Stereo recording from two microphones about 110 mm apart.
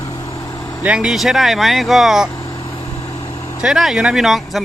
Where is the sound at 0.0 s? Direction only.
30° left (ahead or behind).